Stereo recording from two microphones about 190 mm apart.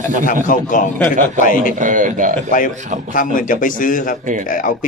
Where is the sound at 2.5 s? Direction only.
45° left (ahead or behind).